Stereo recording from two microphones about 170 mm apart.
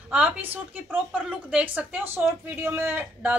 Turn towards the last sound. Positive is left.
turn(degrees=-10)  # may be behind; listen again after turning